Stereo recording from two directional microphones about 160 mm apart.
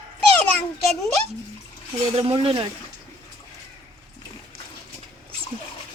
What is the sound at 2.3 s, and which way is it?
Speech, 30° right (ahead or behind).